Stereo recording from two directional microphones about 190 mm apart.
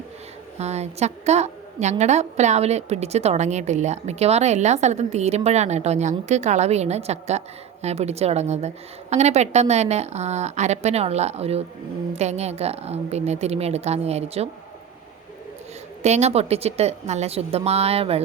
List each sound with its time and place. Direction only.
0.6 s a woman's voice: 35° right (ahead or behind)
16.0 s a woman's voice: 35° right (ahead or behind)